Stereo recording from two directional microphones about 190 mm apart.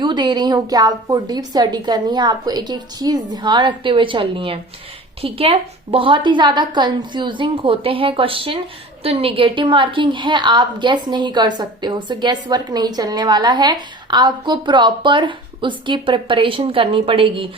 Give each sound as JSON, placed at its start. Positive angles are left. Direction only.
{"t": 0.0, "sound": "a woman's voice", "side_deg": -25}